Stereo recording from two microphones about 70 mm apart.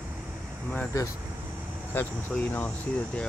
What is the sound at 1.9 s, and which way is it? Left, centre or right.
Speech, left.